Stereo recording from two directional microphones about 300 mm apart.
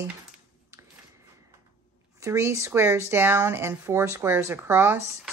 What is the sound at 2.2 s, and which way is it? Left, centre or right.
Speech, centre.